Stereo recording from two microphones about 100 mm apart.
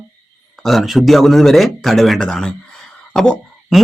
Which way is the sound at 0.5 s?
Centre (ahead or behind).